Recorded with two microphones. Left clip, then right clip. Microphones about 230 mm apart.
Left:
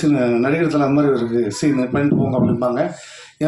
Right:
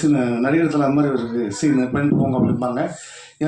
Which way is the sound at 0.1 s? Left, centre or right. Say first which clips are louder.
Left 2 dB; left.